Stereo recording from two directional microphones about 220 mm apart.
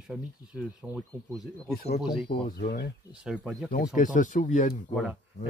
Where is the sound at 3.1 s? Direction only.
5° right (ahead or behind).